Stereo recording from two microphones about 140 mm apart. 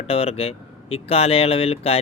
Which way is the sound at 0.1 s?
45° left (ahead or behind).